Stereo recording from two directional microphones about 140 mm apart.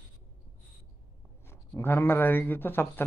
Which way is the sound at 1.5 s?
15° left (ahead or behind).